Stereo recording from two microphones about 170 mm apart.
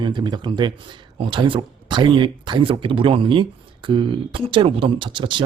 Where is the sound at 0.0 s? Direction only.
25° right (ahead or behind).